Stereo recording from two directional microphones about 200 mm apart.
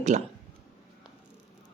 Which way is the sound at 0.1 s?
40° right (ahead or behind).